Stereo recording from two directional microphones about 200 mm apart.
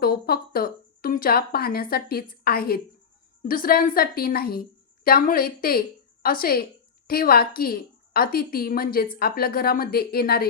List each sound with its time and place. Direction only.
0.0 s a woman's voice: 50° left (ahead or behind)